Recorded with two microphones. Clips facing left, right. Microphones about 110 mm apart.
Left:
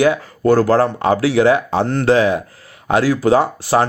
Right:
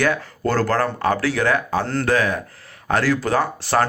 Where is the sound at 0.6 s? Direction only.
20° left (ahead or behind).